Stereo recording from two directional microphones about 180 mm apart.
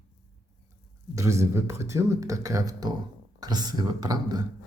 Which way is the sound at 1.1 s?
15° right (ahead or behind).